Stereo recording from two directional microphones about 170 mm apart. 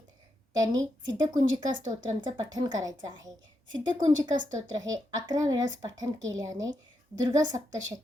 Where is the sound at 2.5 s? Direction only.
25° right (ahead or behind).